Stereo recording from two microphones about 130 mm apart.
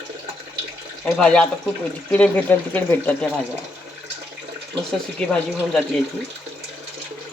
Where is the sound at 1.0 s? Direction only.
10° left (ahead or behind).